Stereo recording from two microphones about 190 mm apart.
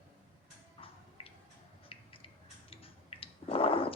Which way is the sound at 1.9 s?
30° left (ahead or behind).